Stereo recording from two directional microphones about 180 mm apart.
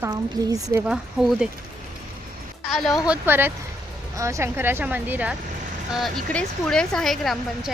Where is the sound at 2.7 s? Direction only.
Centre (ahead or behind).